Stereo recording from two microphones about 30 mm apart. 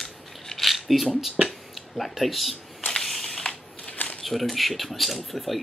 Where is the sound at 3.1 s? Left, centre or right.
Centre.